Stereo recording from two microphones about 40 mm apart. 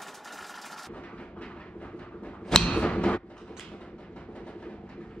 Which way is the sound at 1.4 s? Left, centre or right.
Left.